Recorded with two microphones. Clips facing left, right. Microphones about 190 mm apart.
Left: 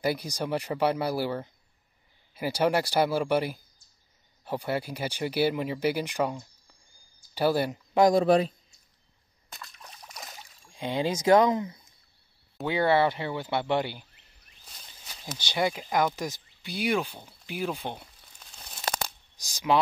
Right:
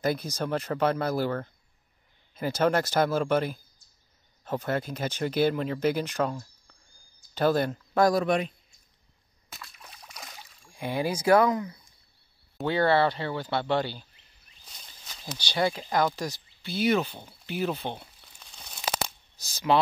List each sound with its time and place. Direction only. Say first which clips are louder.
0.0 s speech: right 1 dB; 10° left (ahead or behind)
8.2 s a man's voice: left 4 dB; 35° left (ahead or behind)
9.5 s a sound: left 1 dB; centre (ahead or behind)
10.7 s speech: left 1 dB; 20° left (ahead or behind)
14.6 s a sound: even; 5° left (ahead or behind)
15.3 s speech: right 1 dB; 15° left (ahead or behind)
17.5 s crumpling: right 2 dB; 10° left (ahead or behind)
19.3 s speech: right 1 dB; 15° left (ahead or behind)